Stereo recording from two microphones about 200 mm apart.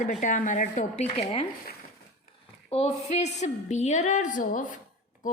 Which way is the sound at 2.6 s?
30° left (ahead or behind).